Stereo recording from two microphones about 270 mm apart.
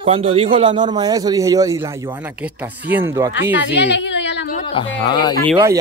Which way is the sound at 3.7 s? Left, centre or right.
Left.